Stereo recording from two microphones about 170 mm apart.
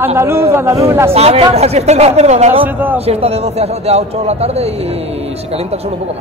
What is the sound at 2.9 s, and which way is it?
A man's voice, 35° right (ahead or behind).